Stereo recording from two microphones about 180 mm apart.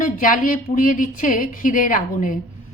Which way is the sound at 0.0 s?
50° left (ahead or behind).